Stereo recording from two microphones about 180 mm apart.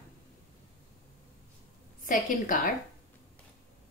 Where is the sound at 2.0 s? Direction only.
50° left (ahead or behind).